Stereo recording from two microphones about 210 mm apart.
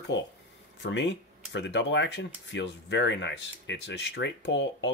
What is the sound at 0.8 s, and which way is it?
Speech, 60° left (ahead or behind).